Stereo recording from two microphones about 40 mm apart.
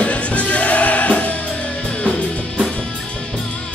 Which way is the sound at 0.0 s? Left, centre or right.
Left.